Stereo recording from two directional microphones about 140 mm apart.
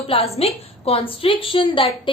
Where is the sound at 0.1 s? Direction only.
45° left (ahead or behind).